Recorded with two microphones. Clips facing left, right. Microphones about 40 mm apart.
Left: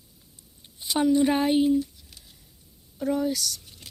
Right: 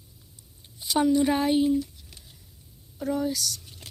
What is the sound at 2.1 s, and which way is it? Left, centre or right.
Patter, right.